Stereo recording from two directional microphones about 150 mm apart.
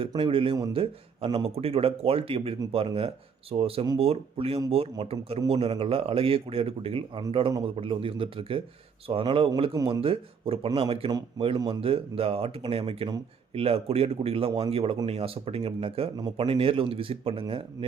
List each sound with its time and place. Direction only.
0.2 s a man's voice: 35° right (ahead or behind)